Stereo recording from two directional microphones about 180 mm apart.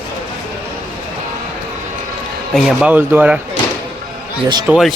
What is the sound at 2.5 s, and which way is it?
Speech, centre (ahead or behind).